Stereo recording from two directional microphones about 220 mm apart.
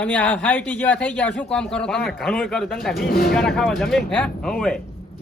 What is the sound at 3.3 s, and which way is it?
Speech, centre (ahead or behind).